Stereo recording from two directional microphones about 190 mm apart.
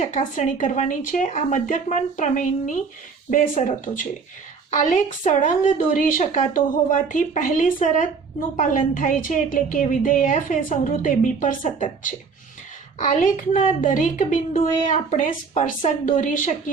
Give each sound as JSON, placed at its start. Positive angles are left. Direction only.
{"t": 0.0, "sound": "a woman's voice", "side_deg": 40}